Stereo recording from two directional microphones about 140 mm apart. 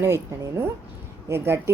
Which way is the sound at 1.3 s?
20° right (ahead or behind).